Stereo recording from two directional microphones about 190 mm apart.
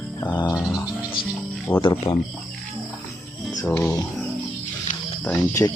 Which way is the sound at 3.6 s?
10° left (ahead or behind).